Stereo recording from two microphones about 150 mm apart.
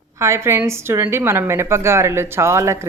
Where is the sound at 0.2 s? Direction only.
20° right (ahead or behind).